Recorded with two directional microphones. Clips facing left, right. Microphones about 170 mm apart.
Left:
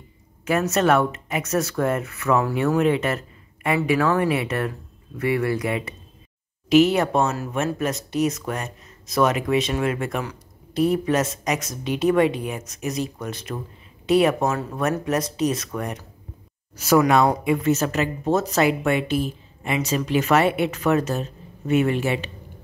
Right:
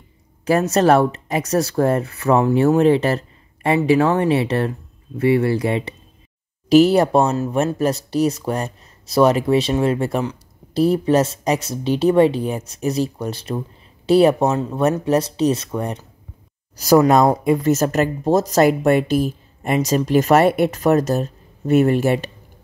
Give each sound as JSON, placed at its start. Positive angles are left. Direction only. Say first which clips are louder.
{"t": 0.5, "sound": "speech", "louder": "right 5 dB", "side_deg": -35}